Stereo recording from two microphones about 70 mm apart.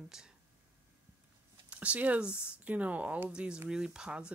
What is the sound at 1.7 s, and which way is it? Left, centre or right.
Speech, centre.